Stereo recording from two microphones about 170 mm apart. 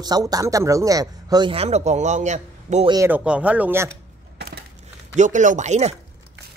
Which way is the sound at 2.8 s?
20° right (ahead or behind).